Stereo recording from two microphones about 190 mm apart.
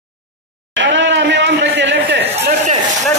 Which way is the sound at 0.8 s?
70° right (ahead or behind).